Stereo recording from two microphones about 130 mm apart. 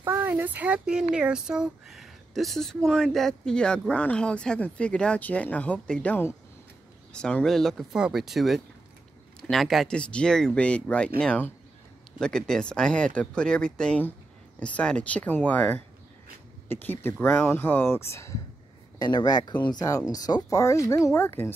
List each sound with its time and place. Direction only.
0.0 s speech: 15° right (ahead or behind); by 18.4 s 20° left (ahead or behind)
18.9 s speech: 30° left (ahead or behind); by 21.5 s 15° left (ahead or behind)